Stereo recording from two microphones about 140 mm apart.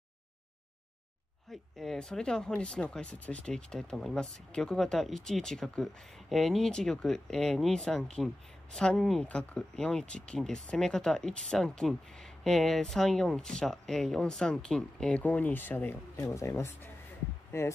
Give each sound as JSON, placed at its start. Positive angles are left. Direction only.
{"t": 1.5, "sound": "speech", "side_deg": 0}